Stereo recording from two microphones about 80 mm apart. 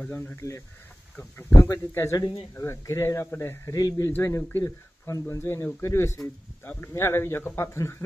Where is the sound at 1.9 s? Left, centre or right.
Left.